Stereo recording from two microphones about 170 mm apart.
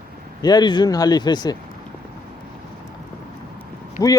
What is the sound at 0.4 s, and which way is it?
Speech, 25° left (ahead or behind).